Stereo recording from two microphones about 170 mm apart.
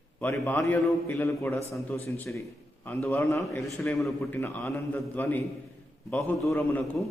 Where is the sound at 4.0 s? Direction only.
Centre (ahead or behind).